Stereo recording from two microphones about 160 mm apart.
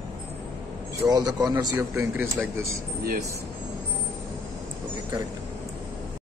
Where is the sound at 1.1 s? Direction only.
25° right (ahead or behind).